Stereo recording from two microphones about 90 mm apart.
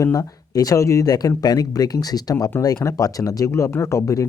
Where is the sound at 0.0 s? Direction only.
40° left (ahead or behind).